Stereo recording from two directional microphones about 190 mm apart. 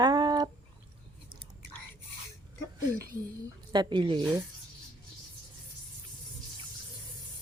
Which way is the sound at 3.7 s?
25° right (ahead or behind).